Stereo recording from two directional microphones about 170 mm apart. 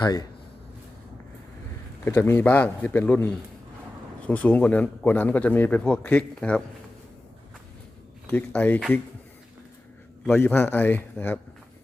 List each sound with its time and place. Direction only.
0.0 s speech: 20° left (ahead or behind)
2.0 s speech: 15° left (ahead or behind)
8.3 s speech: 10° left (ahead or behind)
10.2 s speech: 10° left (ahead or behind)